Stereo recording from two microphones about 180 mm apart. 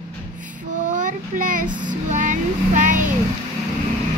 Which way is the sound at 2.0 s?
45° right (ahead or behind).